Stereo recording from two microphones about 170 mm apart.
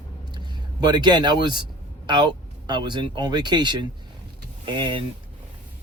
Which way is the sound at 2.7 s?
25° right (ahead or behind).